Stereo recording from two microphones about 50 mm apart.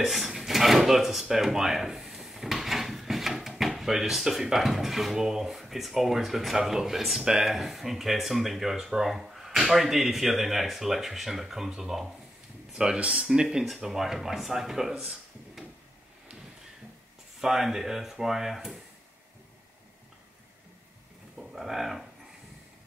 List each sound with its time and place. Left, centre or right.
0.0 s speech: centre
12.7 s speech: centre
17.4 s speech: centre
21.4 s speech: centre